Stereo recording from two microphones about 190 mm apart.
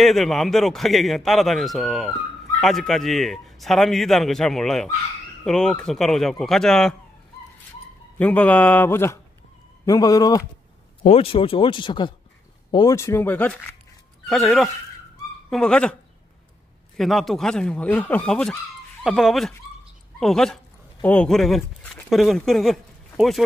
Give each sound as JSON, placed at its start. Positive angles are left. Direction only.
{"t": 0.0, "sound": "a man's voice", "side_deg": 0}
{"t": 8.2, "sound": "speech", "side_deg": 10}
{"t": 11.0, "sound": "a man's voice", "side_deg": 30}